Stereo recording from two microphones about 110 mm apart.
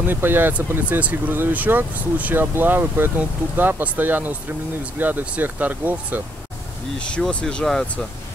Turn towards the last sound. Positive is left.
turn(degrees=5)  # may be behind; listen again after turning